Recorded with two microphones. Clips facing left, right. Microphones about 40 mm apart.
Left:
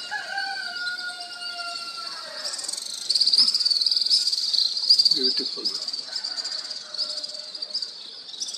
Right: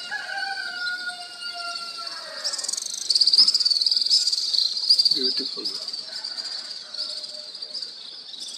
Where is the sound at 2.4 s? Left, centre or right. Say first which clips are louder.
Right 2 dB; left.